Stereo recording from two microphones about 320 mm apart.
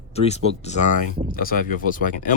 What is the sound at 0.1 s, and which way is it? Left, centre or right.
Speech, centre.